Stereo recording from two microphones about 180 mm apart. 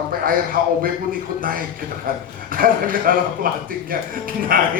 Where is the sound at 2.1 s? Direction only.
55° right (ahead or behind).